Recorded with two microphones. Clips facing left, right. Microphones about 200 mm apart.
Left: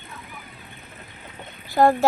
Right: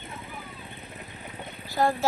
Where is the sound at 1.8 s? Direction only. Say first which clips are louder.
Left 7 dB; 55° left (ahead or behind).